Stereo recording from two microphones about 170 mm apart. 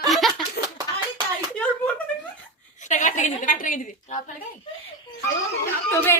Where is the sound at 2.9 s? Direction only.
45° left (ahead or behind).